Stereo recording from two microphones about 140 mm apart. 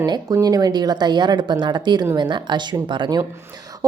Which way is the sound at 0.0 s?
25° right (ahead or behind).